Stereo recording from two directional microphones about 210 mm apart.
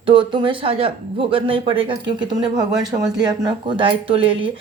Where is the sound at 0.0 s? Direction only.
25° right (ahead or behind).